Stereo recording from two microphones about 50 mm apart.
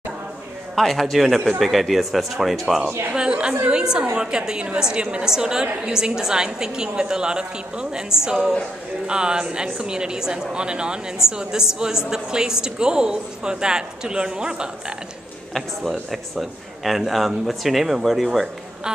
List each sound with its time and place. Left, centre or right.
0.7 s speech: centre
3.1 s a woman's voice: centre
15.5 s speech: centre